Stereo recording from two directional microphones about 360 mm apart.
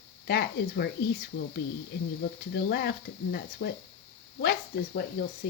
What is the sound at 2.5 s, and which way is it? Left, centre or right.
Speech, left.